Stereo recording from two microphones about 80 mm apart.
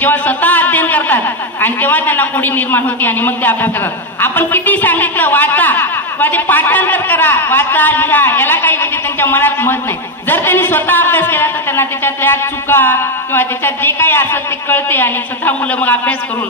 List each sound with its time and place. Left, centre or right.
0.0 s a man's voice: left